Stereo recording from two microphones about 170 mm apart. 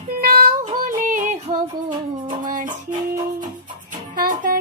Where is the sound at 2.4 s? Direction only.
50° right (ahead or behind).